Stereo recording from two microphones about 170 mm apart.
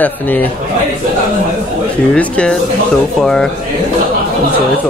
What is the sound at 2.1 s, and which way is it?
Speech, 5° left (ahead or behind).